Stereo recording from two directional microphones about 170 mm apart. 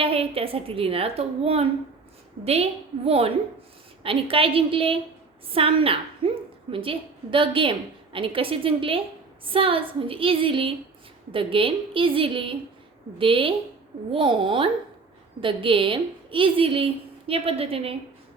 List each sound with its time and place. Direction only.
0.0 s a woman's voice: 35° right (ahead or behind)